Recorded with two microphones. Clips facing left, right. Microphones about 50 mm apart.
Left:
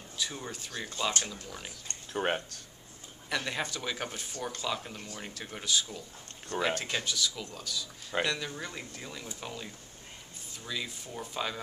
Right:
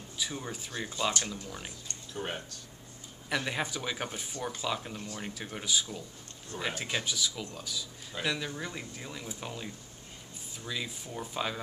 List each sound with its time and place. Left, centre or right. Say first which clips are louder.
0.2 s speech: even; centre
2.1 s speech: left 6 dB; left
3.3 s speech: right 1 dB; centre